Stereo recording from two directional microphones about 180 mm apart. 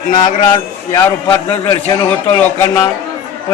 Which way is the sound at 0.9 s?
20° left (ahead or behind).